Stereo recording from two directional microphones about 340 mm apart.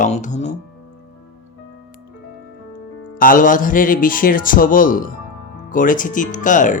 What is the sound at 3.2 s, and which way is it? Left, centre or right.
Speech, left.